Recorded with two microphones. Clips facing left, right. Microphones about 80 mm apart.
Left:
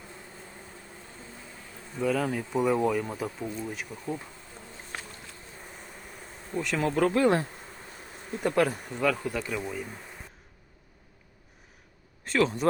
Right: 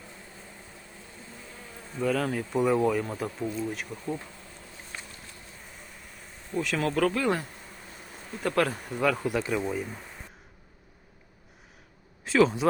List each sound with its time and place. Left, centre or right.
2.0 s speech: centre
4.9 s bee: left
6.5 s bee: centre
6.8 s speech: left
8.4 s speech: centre
8.9 s speech: centre
12.2 s speech: centre